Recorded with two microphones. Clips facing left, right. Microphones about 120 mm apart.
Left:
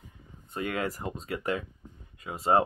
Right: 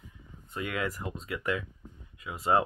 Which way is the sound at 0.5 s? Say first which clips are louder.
Left 2 dB; 35° left (ahead or behind).